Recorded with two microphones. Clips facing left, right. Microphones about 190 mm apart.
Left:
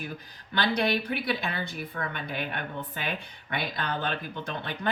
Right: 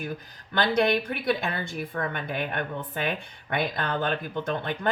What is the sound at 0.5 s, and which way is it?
Speech, 50° right (ahead or behind).